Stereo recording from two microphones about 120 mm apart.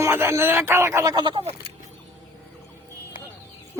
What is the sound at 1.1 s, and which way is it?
Speech, 40° right (ahead or behind).